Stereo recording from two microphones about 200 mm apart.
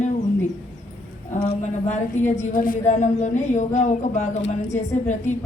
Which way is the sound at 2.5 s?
45° left (ahead or behind).